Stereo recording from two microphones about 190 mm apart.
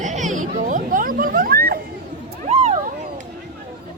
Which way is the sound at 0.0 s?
40° right (ahead or behind).